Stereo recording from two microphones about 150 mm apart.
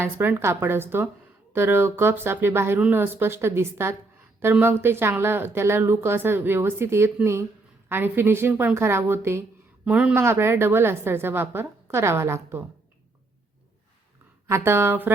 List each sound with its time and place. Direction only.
0.0 s a woman's voice: 15° right (ahead or behind)
14.4 s a woman's voice: 15° right (ahead or behind)